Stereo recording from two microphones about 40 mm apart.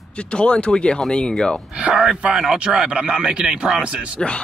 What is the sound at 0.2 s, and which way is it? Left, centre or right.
Speech, left.